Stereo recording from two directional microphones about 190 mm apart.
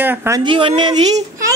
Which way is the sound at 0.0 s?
10° right (ahead or behind).